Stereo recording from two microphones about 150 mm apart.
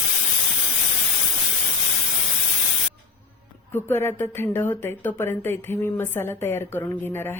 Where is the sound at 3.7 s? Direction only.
15° left (ahead or behind).